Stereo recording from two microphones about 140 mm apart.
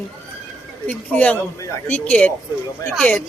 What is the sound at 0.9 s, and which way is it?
Speech, 10° left (ahead or behind).